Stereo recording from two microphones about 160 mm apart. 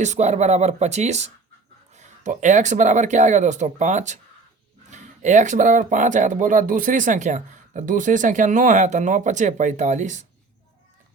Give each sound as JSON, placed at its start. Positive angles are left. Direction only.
{"t": 0.0, "sound": "speech", "side_deg": -45}